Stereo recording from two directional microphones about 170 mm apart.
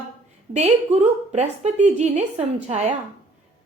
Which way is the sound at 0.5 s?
40° right (ahead or behind).